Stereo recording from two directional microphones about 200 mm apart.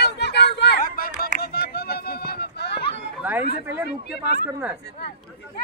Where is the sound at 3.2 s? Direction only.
10° right (ahead or behind).